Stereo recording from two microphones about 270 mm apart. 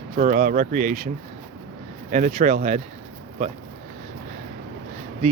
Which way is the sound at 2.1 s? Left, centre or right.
Right.